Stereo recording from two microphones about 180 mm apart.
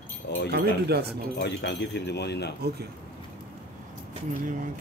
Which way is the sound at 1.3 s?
70° left (ahead or behind).